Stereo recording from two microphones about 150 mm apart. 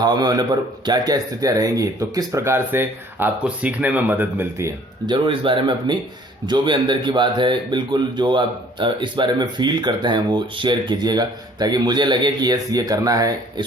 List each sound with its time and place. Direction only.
0.0 s speech: 25° right (ahead or behind)
5.0 s speech: 35° right (ahead or behind)